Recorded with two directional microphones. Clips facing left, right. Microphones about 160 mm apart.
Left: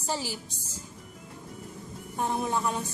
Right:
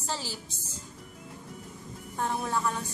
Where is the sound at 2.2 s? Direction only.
15° left (ahead or behind).